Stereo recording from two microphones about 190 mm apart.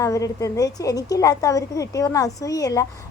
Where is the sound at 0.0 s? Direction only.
15° left (ahead or behind).